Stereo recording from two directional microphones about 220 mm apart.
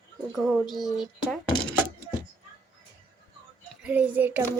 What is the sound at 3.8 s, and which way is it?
Speech, 5° right (ahead or behind).